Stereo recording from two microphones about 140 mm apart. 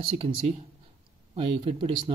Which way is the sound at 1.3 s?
45° right (ahead or behind).